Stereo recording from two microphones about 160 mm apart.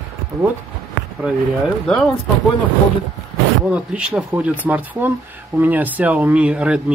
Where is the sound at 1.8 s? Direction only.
5° left (ahead or behind).